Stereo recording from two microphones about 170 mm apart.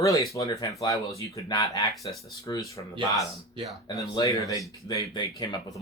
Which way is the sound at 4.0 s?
20° left (ahead or behind).